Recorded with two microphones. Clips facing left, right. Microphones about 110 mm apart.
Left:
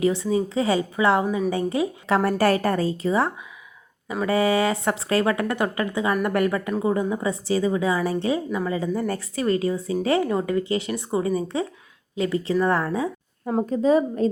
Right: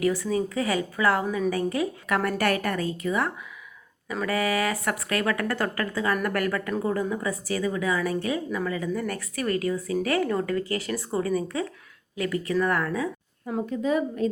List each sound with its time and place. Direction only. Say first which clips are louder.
0.0 s a woman's voice: left 3 dB; 25° left (ahead or behind)